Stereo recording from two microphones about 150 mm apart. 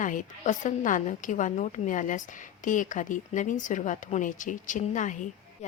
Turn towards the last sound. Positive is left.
turn(degrees=55)  # may be behind; listen again after turning